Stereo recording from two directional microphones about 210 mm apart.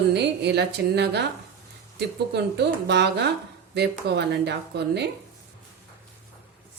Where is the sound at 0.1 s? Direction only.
55° right (ahead or behind).